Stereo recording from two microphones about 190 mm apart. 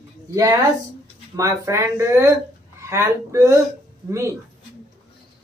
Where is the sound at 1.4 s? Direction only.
15° right (ahead or behind).